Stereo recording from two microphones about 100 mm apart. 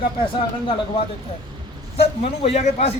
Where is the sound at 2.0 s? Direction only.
90° left.